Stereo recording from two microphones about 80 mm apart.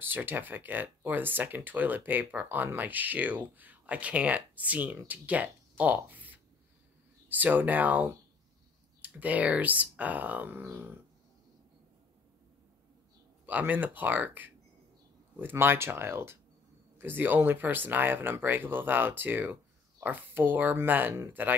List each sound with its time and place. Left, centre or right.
0.0 s speech: right
13.5 s speech: right